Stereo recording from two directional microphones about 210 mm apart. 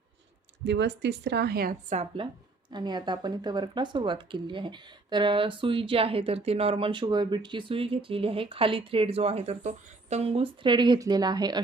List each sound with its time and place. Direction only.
0.6 s speech: 55° right (ahead or behind)
2.2 s speech: 25° right (ahead or behind)